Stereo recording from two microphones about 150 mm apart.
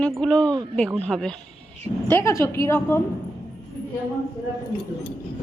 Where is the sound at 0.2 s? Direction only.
10° left (ahead or behind).